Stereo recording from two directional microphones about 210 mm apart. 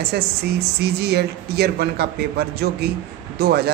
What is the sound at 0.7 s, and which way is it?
Speech, 50° right (ahead or behind).